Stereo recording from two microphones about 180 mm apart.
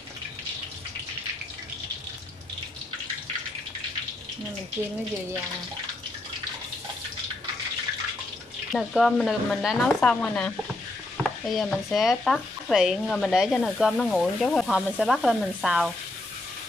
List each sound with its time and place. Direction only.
8.7 s speech: centre (ahead or behind)